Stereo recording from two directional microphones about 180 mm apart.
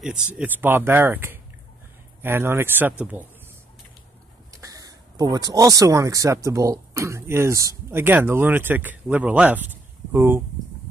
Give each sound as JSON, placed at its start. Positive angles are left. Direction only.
{"t": 0.0, "sound": "speech", "side_deg": -5}
{"t": 4.5, "sound": "speech", "side_deg": -20}